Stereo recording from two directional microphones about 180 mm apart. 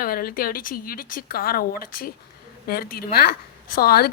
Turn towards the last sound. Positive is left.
turn(degrees=60)  # may be behind; listen again after turning